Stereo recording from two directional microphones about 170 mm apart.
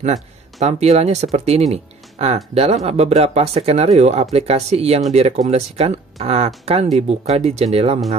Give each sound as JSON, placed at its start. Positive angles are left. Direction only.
{"t": 0.0, "sound": "speech", "side_deg": -40}